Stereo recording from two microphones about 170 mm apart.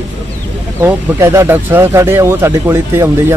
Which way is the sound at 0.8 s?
15° right (ahead or behind).